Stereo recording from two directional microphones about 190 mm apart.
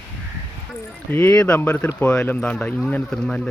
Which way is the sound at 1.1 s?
5° left (ahead or behind).